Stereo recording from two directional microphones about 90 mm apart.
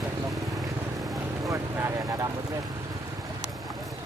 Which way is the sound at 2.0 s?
40° right (ahead or behind).